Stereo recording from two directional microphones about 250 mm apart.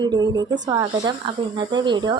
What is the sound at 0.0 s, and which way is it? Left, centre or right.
A woman's voice, centre.